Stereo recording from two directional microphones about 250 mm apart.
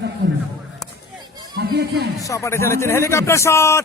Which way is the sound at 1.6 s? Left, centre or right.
Right.